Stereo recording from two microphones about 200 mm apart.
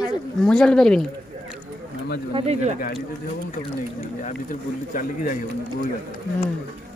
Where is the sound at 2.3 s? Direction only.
35° right (ahead or behind).